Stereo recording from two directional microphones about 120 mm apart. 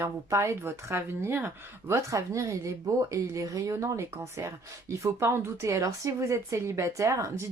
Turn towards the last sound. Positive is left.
turn(degrees=-25)  # may be behind; listen again after turning